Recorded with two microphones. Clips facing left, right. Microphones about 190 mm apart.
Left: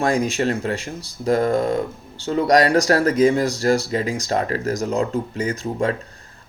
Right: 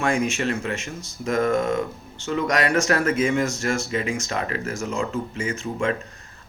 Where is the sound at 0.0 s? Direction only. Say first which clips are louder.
Left 3 dB; 35° left (ahead or behind).